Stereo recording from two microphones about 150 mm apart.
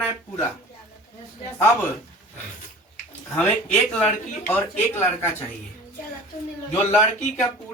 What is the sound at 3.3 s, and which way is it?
Speech, 10° left (ahead or behind).